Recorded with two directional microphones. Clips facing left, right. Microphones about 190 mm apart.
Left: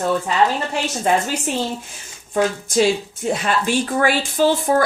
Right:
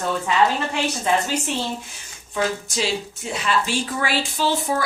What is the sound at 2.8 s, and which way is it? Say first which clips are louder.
Speech: left 11 dB; 50° left (ahead or behind).